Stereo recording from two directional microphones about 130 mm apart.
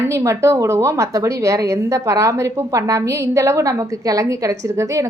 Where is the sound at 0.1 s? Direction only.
25° right (ahead or behind).